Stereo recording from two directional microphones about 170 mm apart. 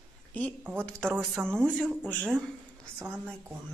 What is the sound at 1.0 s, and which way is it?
A woman's voice, centre (ahead or behind).